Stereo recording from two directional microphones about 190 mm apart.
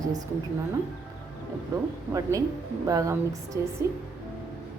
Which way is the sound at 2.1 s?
15° right (ahead or behind).